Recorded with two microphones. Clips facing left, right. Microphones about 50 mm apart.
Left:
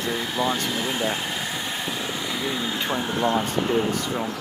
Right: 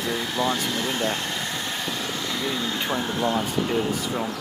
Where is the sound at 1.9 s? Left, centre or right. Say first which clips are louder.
Even; centre.